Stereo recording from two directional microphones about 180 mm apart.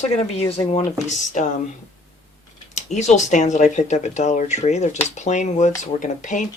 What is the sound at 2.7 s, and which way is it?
Speech, 40° left (ahead or behind).